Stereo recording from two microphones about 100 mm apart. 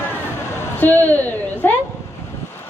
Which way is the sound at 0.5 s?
20° left (ahead or behind).